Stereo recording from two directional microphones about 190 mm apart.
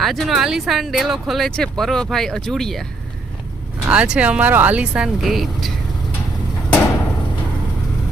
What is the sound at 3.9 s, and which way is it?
Speech, 5° right (ahead or behind).